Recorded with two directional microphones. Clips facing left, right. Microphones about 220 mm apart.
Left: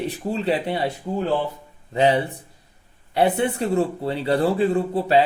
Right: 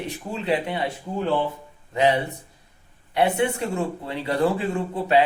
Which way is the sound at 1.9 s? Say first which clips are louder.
Left 2 dB; 30° left (ahead or behind).